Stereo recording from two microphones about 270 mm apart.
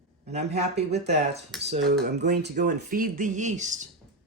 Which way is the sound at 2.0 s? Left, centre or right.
Right.